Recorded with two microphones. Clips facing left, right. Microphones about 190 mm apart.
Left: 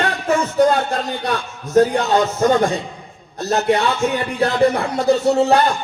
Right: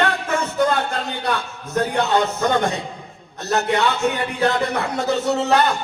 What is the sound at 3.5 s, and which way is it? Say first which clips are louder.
Speech: left 2 dB; 35° left (ahead or behind).